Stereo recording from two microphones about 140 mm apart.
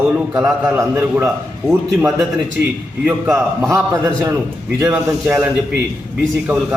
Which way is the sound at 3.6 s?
20° right (ahead or behind).